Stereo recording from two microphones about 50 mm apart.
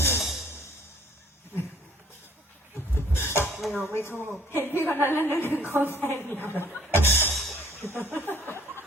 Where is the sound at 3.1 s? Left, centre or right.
Left.